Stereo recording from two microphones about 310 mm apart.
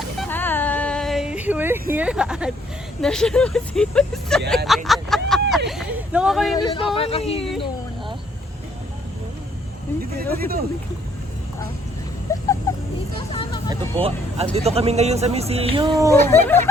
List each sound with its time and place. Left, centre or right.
0.2 s a sound: centre
2.0 s speech: centre
6.6 s speech: centre
10.3 s speech: right
12.7 s a sound: centre
13.3 s vehicle: centre
14.0 s speech: centre
16.2 s speech: centre